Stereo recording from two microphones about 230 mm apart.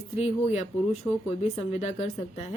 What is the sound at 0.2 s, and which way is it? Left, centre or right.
Speech, left.